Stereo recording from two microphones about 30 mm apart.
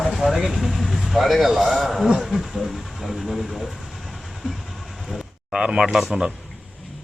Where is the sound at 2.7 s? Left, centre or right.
Centre.